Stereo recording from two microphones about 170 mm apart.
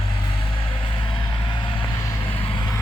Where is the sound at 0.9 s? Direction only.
30° left (ahead or behind).